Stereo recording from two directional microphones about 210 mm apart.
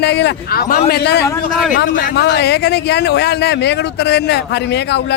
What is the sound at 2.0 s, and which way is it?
Speech, 55° left (ahead or behind).